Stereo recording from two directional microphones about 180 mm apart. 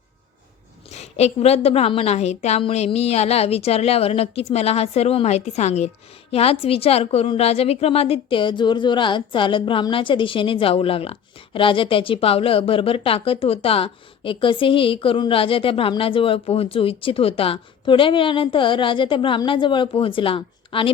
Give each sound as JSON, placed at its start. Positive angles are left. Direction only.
{"t": 0.9, "sound": "a woman's voice", "side_deg": 35}